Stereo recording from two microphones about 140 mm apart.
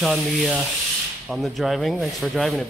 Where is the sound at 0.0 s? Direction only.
Centre (ahead or behind).